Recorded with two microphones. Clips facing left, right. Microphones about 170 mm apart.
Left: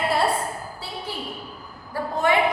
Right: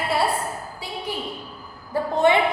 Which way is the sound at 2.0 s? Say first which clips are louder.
Right 4 dB; 25° right (ahead or behind).